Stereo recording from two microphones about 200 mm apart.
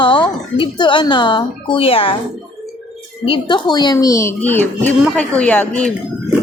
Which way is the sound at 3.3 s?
25° left (ahead or behind).